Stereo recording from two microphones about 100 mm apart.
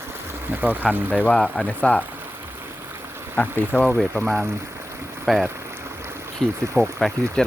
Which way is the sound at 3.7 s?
10° left (ahead or behind).